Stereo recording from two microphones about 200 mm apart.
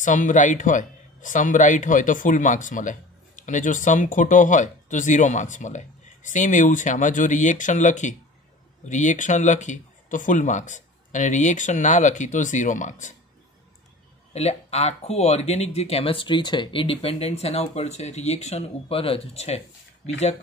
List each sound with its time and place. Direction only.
0.0 s speech: 40° left (ahead or behind)
14.3 s speech: 30° left (ahead or behind)